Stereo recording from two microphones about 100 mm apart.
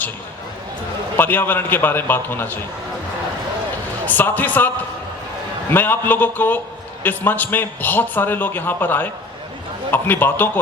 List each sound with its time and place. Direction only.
1.1 s a man's voice: 20° left (ahead or behind)
4.0 s speech: 20° left (ahead or behind)
5.7 s a man's voice: 20° left (ahead or behind)